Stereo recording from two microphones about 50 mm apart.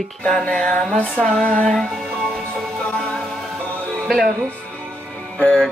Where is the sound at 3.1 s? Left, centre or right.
Centre.